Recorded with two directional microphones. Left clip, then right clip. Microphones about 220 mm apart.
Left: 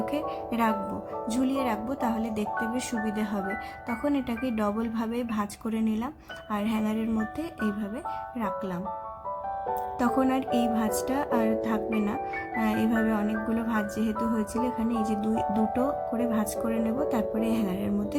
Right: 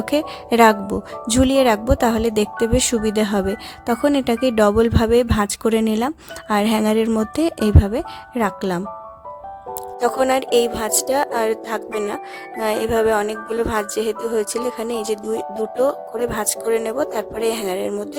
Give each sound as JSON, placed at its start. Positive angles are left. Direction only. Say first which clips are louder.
{"t": 0.0, "sound": "speech", "louder": "right 8 dB", "side_deg": -45}
{"t": 10.2, "sound": "speech", "louder": "right 12 dB", "side_deg": -45}
{"t": 16.3, "sound": "speech", "louder": "right 8 dB", "side_deg": -40}